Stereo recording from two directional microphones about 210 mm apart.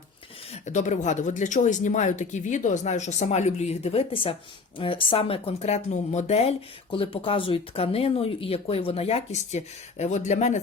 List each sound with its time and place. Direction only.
0.5 s speech: 35° left (ahead or behind)